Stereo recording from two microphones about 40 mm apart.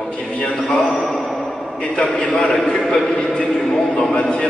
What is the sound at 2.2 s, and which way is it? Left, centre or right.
A man's voice, centre.